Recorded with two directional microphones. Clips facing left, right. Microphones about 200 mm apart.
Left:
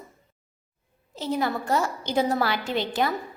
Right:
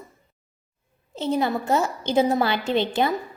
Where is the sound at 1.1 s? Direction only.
25° right (ahead or behind).